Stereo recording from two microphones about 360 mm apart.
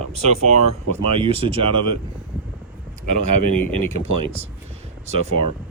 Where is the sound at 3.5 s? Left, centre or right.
Right.